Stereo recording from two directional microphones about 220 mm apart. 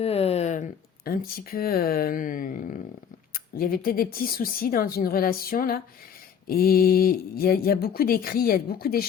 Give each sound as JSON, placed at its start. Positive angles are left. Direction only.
{"t": 0.0, "sound": "speech", "side_deg": 25}